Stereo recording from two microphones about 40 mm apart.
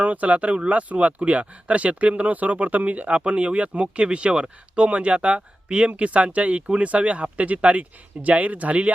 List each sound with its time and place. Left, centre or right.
0.0 s speech: right